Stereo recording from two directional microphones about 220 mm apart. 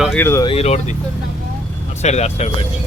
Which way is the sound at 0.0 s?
5° left (ahead or behind).